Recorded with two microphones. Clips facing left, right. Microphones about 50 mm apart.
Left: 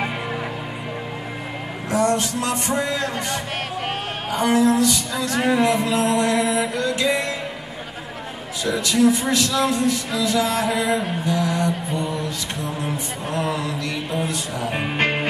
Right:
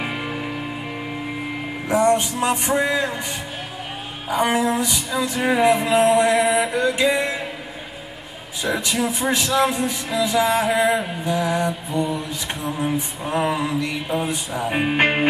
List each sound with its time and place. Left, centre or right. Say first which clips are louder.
1.9 s speech: right 2 dB; centre
5.4 s a sound: even; centre
5.7 s speech: right 4 dB; right
8.6 s speech: left 4 dB; right